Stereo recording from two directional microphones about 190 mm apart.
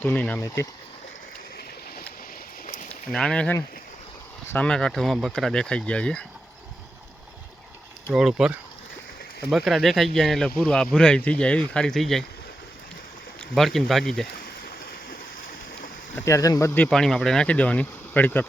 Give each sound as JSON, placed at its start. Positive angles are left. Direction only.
{"t": 0.0, "sound": "speech", "side_deg": 10}
{"t": 2.9, "sound": "speech", "side_deg": 5}
{"t": 8.1, "sound": "speech", "side_deg": -5}
{"t": 13.5, "sound": "speech", "side_deg": 0}
{"t": 14.4, "sound": "stream", "side_deg": 50}
{"t": 16.1, "sound": "speech", "side_deg": 15}